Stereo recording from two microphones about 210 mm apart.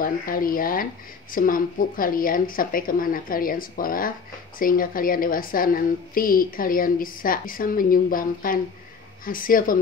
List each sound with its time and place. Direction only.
0.0 s a woman's voice: 40° left (ahead or behind)